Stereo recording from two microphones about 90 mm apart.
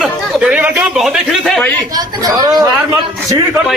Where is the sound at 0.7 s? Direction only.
10° right (ahead or behind).